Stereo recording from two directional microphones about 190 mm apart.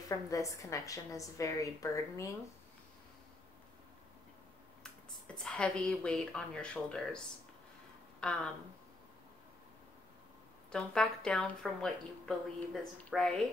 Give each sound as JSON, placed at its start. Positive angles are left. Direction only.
{"t": 0.1, "sound": "a woman's voice", "side_deg": 15}
{"t": 5.3, "sound": "speech", "side_deg": 5}
{"t": 10.7, "sound": "speech", "side_deg": 5}